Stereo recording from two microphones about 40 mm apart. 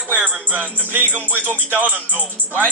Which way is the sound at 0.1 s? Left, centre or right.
Right.